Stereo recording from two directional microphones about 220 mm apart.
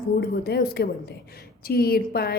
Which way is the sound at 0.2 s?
45° left (ahead or behind).